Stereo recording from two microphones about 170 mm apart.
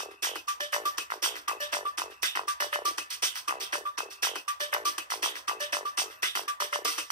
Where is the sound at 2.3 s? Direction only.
25° right (ahead or behind).